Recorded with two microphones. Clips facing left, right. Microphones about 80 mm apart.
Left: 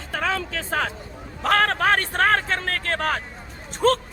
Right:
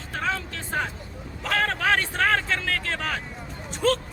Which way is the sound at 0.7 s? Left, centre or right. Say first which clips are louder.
Left 3 dB; left.